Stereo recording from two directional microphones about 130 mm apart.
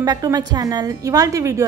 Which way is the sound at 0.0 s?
30° right (ahead or behind).